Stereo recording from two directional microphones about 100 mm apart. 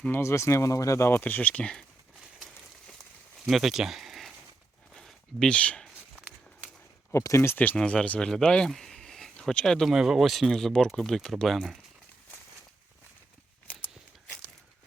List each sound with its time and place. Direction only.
0.2 s speech: 30° left (ahead or behind); by 1.8 s 10° left (ahead or behind)
3.4 s speech: 5° right (ahead or behind)
4.9 s a sound: 5° left (ahead or behind)
7.1 s speech: 30° left (ahead or behind); by 11.8 s centre (ahead or behind)